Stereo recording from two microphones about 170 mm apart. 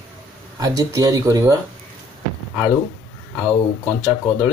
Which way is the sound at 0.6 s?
20° right (ahead or behind).